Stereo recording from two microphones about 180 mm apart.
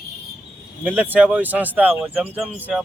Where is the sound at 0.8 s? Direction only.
10° right (ahead or behind).